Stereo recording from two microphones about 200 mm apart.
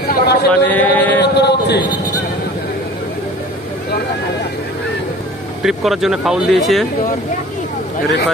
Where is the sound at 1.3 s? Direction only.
55° left (ahead or behind).